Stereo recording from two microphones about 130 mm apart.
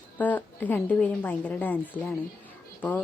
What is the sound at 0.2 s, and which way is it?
A woman's voice, 10° left (ahead or behind).